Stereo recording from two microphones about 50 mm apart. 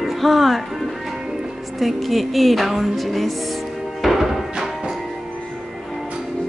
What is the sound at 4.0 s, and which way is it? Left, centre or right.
Music, centre.